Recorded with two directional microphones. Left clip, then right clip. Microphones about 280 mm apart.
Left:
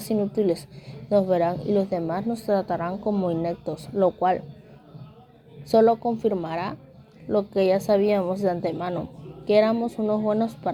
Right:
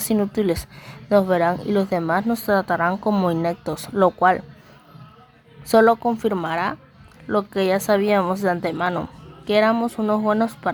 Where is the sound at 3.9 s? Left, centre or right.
Right.